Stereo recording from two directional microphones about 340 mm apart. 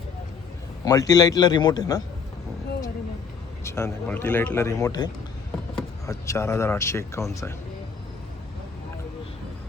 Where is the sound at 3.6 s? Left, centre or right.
Centre.